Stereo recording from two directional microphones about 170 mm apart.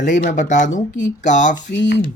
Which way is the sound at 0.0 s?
45° left (ahead or behind).